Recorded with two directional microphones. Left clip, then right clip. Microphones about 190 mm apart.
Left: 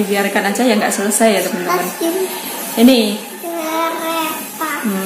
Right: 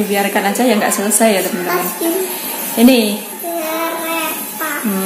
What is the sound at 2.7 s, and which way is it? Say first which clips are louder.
Speech: even; 5° right (ahead or behind).